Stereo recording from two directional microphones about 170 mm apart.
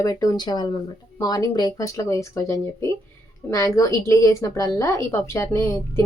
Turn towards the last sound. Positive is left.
turn(degrees=20)  # may be behind; listen again after turning